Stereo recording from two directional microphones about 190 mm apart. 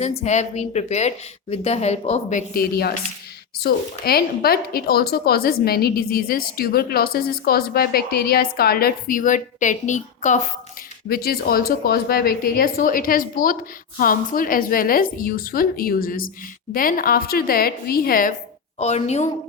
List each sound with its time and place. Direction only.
0.0 s a woman's voice: 35° left (ahead or behind)
11.1 s a woman's voice: 55° left (ahead or behind)
18.8 s a woman's voice: 35° left (ahead or behind)